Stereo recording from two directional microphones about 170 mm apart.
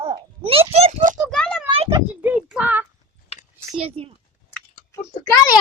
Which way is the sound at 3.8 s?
35° right (ahead or behind).